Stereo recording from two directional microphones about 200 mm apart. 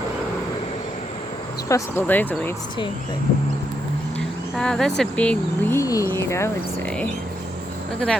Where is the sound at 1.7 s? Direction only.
15° left (ahead or behind).